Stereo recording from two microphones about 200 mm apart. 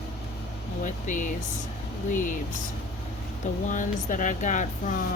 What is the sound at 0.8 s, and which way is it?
Speech, 40° left (ahead or behind).